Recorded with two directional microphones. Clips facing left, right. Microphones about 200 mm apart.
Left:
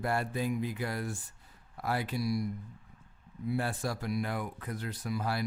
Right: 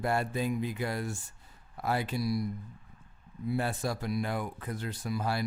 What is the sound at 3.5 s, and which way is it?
Speech, 20° right (ahead or behind).